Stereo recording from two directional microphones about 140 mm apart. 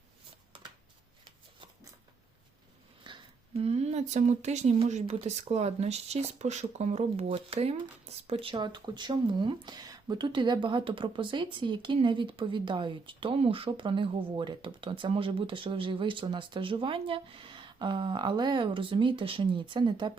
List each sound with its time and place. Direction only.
3.0 s speech: 40° right (ahead or behind)